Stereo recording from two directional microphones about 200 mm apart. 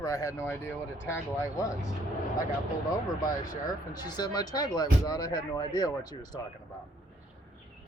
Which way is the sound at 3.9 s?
20° left (ahead or behind).